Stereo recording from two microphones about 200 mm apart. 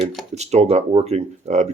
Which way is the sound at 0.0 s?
Centre (ahead or behind).